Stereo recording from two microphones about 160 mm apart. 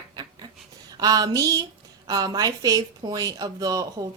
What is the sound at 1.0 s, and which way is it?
A woman's voice, 25° right (ahead or behind).